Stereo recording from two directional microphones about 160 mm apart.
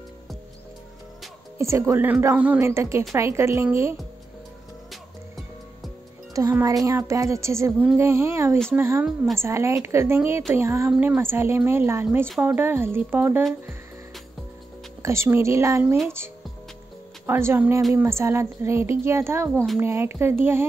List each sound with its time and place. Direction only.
1.6 s a woman's voice: 20° right (ahead or behind)
6.3 s music: 20° right (ahead or behind)
8.7 s a woman's voice: 15° right (ahead or behind)
15.0 s a woman's voice: 15° right (ahead or behind)
17.3 s a woman's voice: 15° right (ahead or behind)